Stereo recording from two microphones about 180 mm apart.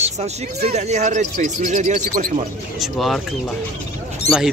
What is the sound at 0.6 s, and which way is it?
Speech, 40° right (ahead or behind).